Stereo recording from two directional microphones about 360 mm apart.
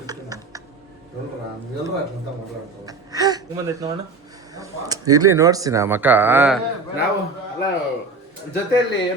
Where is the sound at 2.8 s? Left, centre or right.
Centre.